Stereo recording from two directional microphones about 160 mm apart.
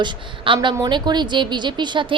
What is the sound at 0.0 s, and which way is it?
A woman's voice, 30° right (ahead or behind).